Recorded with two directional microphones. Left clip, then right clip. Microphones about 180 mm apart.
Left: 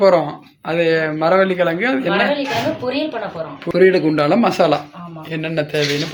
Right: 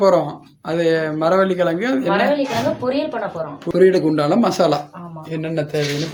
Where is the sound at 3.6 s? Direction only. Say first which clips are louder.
Left 1 dB; 10° right (ahead or behind).